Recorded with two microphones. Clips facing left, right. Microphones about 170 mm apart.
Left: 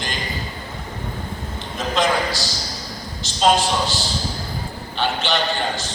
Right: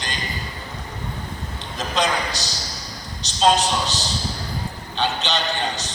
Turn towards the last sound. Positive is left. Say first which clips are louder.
# left 2 dB
turn(degrees=-20)  # may be behind; listen again after turning